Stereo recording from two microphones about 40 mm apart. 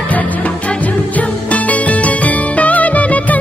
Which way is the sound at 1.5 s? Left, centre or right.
Left.